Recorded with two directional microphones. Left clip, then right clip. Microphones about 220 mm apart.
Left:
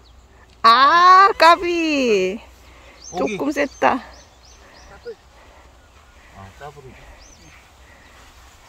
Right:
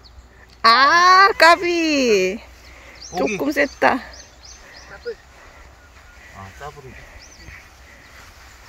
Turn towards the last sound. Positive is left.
turn(degrees=15)  # may be behind; listen again after turning